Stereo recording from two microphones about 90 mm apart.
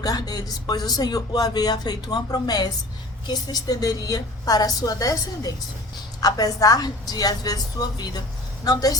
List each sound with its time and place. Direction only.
0.0 s speech: 45° left (ahead or behind)